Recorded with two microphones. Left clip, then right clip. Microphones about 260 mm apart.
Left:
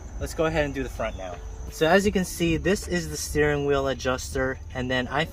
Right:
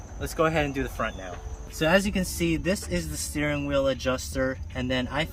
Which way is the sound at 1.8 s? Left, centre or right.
Centre.